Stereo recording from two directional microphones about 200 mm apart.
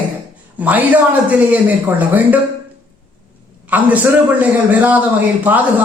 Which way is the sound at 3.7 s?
10° right (ahead or behind).